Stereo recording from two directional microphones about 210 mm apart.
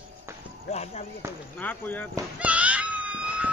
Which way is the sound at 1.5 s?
10° left (ahead or behind).